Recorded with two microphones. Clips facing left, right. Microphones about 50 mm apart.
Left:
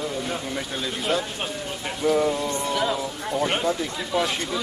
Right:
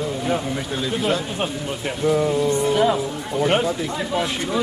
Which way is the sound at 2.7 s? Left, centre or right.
Centre.